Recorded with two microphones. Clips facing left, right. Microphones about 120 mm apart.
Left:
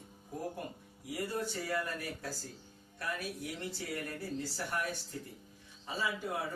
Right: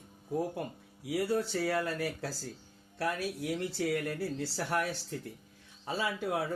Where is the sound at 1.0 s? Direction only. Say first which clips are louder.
Right 6 dB; 75° right (ahead or behind); by 2.3 s 90° right.